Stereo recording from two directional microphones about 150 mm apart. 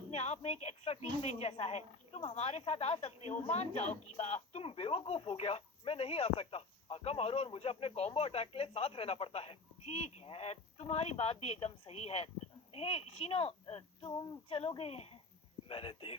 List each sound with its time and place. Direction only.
0.1 s speech: 45° left (ahead or behind)